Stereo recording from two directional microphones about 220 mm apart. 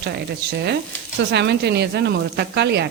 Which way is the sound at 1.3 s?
50° right (ahead or behind).